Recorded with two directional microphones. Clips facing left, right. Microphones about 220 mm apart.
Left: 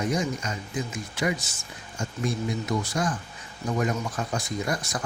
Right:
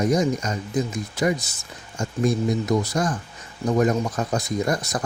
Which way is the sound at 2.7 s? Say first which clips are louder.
Right 5 dB; 40° right (ahead or behind).